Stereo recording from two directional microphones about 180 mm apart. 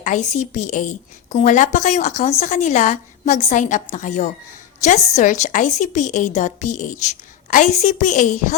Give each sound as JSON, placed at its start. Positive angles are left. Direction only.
{"t": 0.0, "sound": "a woman's voice", "side_deg": 40}